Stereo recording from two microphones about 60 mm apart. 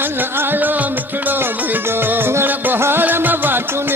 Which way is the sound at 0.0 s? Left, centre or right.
Right.